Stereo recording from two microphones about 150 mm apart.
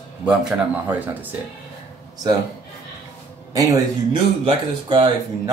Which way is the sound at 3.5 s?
25° right (ahead or behind).